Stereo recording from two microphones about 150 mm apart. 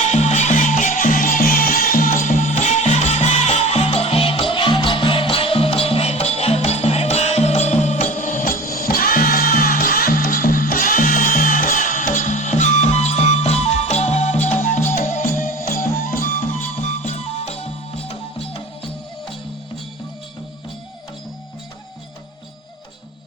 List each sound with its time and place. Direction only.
0.1 s music: 50° left (ahead or behind)
8.1 s music: 60° left (ahead or behind)
17.1 s music: 45° left (ahead or behind)